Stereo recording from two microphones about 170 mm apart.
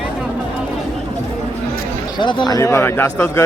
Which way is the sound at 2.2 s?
30° left (ahead or behind).